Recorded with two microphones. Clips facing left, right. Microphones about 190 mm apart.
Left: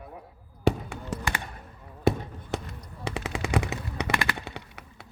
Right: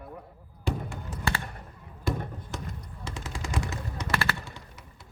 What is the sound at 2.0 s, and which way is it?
Basketball bounce, 65° left (ahead or behind).